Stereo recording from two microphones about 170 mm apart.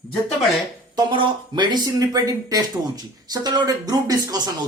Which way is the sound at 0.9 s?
25° right (ahead or behind).